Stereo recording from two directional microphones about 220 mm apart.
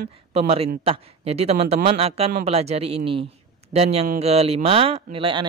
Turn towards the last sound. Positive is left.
turn(degrees=-25)  # may be behind; listen again after turning